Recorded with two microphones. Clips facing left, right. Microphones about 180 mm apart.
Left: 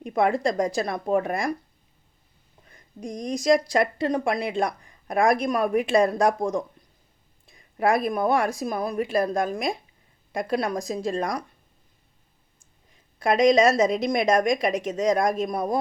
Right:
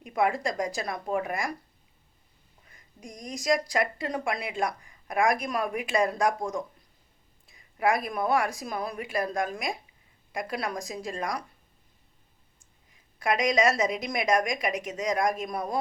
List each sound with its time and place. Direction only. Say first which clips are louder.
0.0 s speech: left 4 dB; 30° left (ahead or behind)
3.0 s speech: left 9 dB; 25° left (ahead or behind)
7.4 s speech: left 3 dB; 30° left (ahead or behind)
13.1 s speech: left 7 dB; 30° left (ahead or behind)